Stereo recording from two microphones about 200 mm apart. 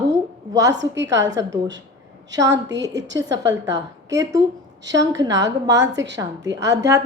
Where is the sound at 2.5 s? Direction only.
60° right (ahead or behind).